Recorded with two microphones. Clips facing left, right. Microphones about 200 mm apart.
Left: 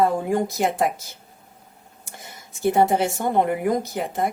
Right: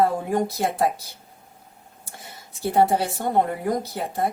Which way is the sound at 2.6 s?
20° left (ahead or behind).